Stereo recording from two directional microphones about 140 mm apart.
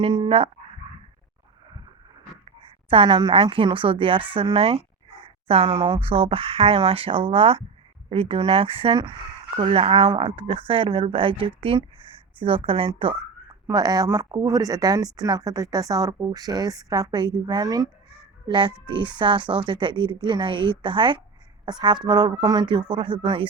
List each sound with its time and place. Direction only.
0.0 s speech: 40° right (ahead or behind)
2.9 s a woman's voice: 40° right (ahead or behind)
5.2 s a sound: 40° right (ahead or behind)
5.7 s a woman's voice: 35° right (ahead or behind)
13.5 s a woman's voice: 25° right (ahead or behind)